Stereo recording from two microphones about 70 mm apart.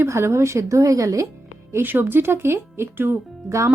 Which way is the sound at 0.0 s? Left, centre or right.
Right.